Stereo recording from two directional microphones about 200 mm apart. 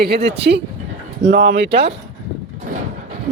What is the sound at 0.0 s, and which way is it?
Speech, 55° right (ahead or behind).